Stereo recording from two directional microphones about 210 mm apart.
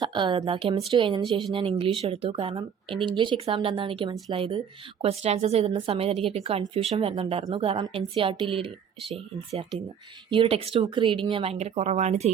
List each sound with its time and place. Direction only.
0.0 s speech: 20° right (ahead or behind)